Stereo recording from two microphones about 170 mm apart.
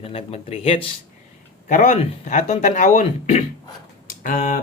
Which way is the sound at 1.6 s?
45° left (ahead or behind).